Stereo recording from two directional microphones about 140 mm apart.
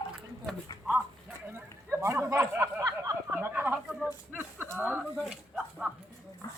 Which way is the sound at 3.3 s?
10° right (ahead or behind).